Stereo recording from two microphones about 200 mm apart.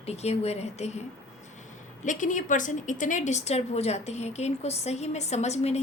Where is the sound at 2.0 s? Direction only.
40° left (ahead or behind).